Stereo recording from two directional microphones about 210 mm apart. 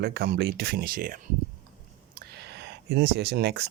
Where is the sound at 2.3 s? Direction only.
50° right (ahead or behind).